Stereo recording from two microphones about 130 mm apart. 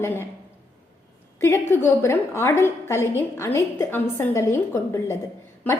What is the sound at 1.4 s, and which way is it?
A woman's voice, 20° left (ahead or behind).